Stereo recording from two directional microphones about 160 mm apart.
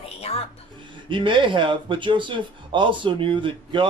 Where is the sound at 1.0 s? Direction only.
30° right (ahead or behind).